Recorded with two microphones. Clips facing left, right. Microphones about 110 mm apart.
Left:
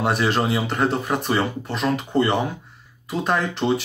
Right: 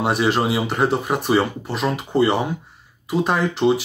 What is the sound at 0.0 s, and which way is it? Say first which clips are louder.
Speech: right 2 dB; 5° right (ahead or behind).